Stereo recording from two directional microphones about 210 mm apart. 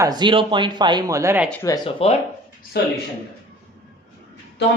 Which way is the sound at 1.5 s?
15° left (ahead or behind).